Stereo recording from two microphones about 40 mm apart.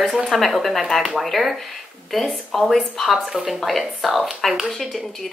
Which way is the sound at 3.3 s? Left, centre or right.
Centre.